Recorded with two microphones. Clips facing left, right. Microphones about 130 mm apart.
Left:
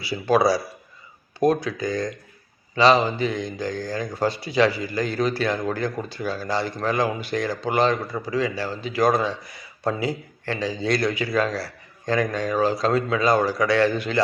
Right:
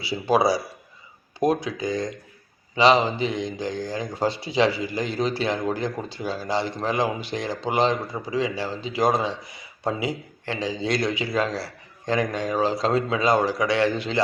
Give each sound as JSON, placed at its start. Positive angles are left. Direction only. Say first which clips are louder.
{"t": 0.0, "sound": "speech", "louder": "left 1 dB", "side_deg": -25}